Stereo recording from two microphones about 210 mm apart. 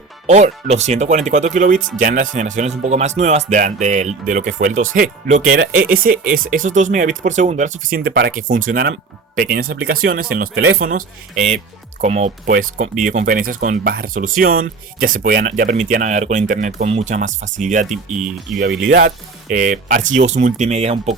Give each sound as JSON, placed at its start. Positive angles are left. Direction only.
{"t": 0.3, "sound": "speech", "side_deg": -30}
{"t": 8.4, "sound": "speech", "side_deg": -40}
{"t": 17.9, "sound": "speech", "side_deg": 0}
{"t": 19.5, "sound": "speech", "side_deg": -40}